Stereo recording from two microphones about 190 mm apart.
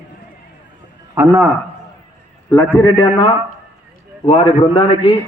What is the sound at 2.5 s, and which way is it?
Speech, 15° left (ahead or behind).